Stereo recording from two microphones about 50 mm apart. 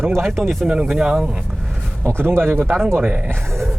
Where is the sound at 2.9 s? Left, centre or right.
Right.